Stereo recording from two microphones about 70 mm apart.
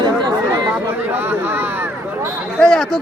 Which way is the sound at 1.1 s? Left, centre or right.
Right.